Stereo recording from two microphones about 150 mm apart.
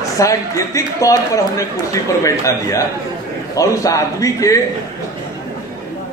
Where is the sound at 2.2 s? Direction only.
20° left (ahead or behind).